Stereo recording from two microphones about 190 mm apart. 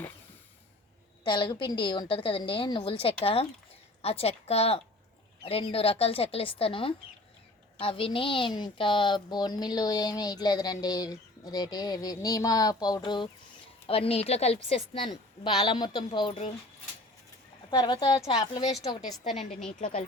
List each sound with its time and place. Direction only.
1.2 s a woman's voice: 25° left (ahead or behind)
17.7 s a woman's voice: 25° left (ahead or behind)
19.2 s a woman's voice: centre (ahead or behind)
19.8 s speech: 45° left (ahead or behind)